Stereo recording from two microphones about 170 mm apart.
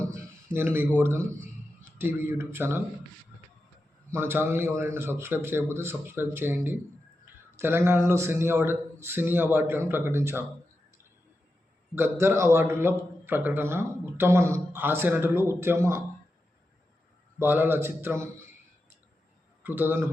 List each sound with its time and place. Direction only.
0.1 s a sound: 15° right (ahead or behind)
0.9 s a man's voice: 15° right (ahead or behind)
4.1 s a man's voice: 15° right (ahead or behind)
11.9 s a man's voice: 15° right (ahead or behind)
17.4 s a man's voice: 10° right (ahead or behind)
19.6 s a man's voice: 10° right (ahead or behind)